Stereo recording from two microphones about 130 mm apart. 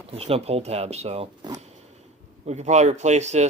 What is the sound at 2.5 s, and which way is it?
Speech, 60° right (ahead or behind).